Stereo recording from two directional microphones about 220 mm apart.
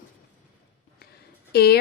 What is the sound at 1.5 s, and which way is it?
Speech, 45° left (ahead or behind).